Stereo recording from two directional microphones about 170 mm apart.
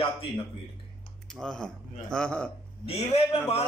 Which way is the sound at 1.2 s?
5° left (ahead or behind).